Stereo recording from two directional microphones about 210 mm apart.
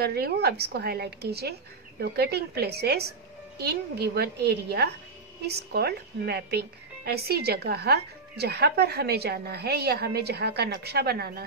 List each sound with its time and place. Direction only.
0.0 s speech: 50° right (ahead or behind)